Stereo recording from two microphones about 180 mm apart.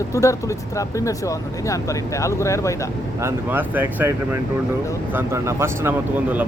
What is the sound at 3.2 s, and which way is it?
Speech, 10° right (ahead or behind).